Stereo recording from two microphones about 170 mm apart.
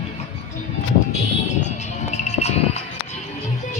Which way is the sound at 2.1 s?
40° left (ahead or behind).